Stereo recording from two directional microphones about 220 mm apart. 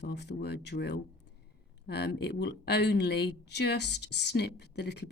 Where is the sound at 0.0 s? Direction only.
50° left (ahead or behind).